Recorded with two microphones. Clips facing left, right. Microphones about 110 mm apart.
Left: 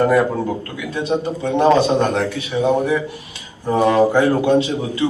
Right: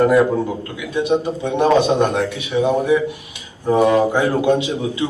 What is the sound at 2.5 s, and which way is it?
Speech, 5° right (ahead or behind).